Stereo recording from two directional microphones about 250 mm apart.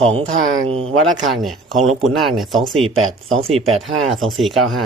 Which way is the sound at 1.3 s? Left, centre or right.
Centre.